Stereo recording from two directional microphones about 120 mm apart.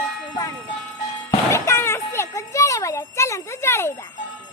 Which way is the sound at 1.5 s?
25° left (ahead or behind).